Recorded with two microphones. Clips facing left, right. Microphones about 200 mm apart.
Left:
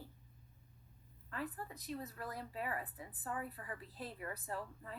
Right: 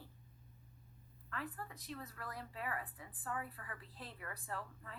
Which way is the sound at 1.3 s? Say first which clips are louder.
Left 2 dB; 20° left (ahead or behind).